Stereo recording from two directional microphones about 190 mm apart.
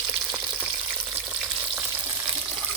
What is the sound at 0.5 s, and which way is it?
Frying, 10° right (ahead or behind).